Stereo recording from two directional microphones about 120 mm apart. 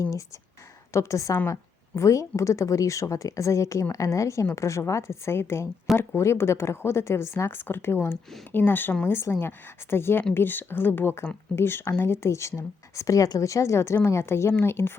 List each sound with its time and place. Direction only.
0.9 s a woman's voice: 25° left (ahead or behind)